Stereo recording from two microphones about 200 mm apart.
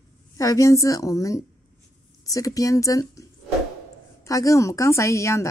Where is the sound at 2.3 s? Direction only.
15° left (ahead or behind).